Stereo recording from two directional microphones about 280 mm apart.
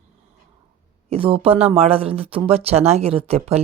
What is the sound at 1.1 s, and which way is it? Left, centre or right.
Speech, centre.